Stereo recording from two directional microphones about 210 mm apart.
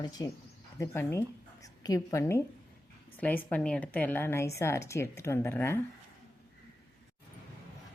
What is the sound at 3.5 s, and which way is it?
A woman's voice, 5° left (ahead or behind).